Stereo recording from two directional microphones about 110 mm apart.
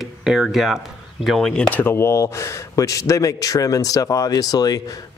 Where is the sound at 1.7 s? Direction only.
20° left (ahead or behind).